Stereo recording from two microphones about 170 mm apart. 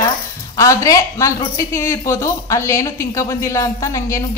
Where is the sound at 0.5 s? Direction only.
20° left (ahead or behind).